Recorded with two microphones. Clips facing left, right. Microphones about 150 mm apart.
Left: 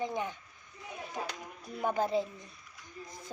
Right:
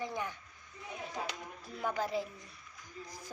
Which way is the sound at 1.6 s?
20° left (ahead or behind).